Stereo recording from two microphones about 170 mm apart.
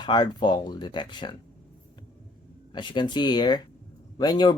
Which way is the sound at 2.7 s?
25° left (ahead or behind).